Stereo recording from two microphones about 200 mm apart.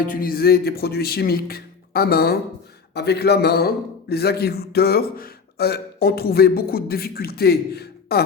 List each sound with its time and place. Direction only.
0.0 s a man's voice: 45° left (ahead or behind)